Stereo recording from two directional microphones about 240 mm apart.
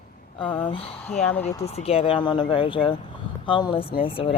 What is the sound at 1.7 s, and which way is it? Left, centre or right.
Speech, left.